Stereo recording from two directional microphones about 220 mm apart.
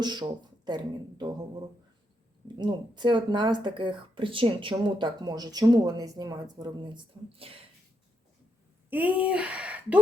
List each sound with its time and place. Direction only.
0.0 s speech: 20° right (ahead or behind)
2.6 s speech: 20° right (ahead or behind)
8.9 s speech: 5° right (ahead or behind)